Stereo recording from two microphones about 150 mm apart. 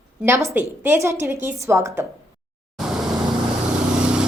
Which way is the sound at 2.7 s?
Centre (ahead or behind).